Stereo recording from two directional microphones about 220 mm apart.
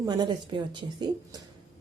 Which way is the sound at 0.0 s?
20° right (ahead or behind).